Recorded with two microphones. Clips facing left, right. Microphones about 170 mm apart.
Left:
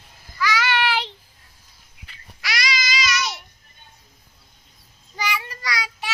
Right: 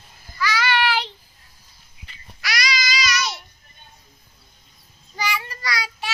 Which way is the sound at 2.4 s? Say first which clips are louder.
Right 1 dB; 25° left (ahead or behind).